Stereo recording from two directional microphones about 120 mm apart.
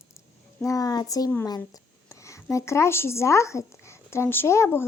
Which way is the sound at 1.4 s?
30° left (ahead or behind).